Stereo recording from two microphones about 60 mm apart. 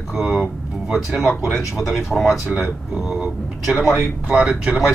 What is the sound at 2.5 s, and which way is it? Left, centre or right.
Speech, right.